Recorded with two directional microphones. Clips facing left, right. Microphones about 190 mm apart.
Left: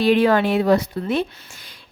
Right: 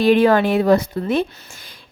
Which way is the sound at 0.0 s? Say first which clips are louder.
Right 2 dB; 45° right (ahead or behind).